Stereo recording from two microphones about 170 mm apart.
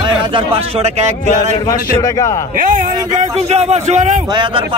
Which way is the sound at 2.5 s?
55° right (ahead or behind).